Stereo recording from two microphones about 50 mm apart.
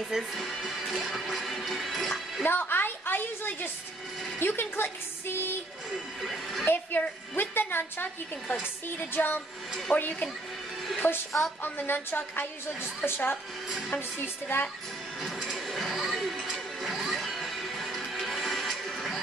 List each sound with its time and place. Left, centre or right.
0.3 s music: centre
2.4 s a sound: left
4.4 s a woman's voice: left
6.2 s a woman's voice: centre
6.6 s a woman's voice: left
15.2 s printer: centre
15.9 s music: centre